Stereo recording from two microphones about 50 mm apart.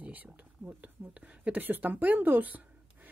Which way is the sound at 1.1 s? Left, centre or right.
Right.